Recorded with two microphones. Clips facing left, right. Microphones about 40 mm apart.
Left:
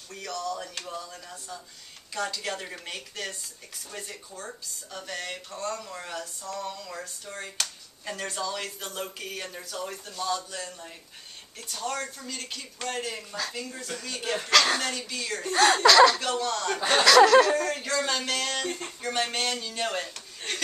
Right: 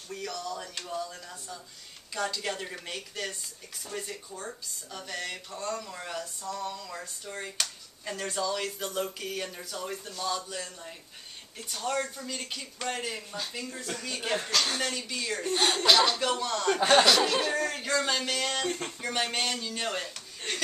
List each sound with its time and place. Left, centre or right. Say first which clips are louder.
0.1 s speech: left 2 dB; centre
14.5 s speech: left 10 dB; left
14.9 s speech: left 1 dB; centre
15.8 s a sound: left 4 dB; left
16.2 s speech: left 1 dB; centre
17.0 s a sound: left 8 dB; left
17.6 s speech: left 1 dB; centre